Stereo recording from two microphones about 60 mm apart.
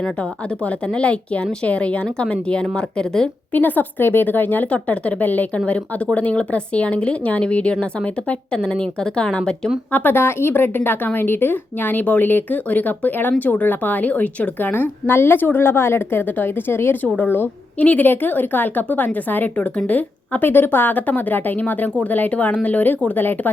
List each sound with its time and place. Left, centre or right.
0.6 s speech: left
3.5 s a woman's voice: left
5.5 s speech: centre
9.9 s a woman's voice: left